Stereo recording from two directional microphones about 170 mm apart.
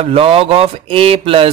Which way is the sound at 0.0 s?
35° right (ahead or behind).